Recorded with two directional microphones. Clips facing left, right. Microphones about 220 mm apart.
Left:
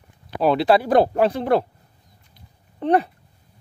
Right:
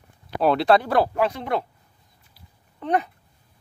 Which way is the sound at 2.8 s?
30° left (ahead or behind).